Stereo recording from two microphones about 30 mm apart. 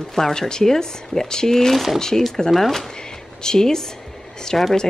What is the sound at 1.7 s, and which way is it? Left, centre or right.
Speech, centre.